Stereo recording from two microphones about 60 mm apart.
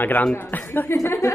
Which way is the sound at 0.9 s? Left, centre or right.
Left.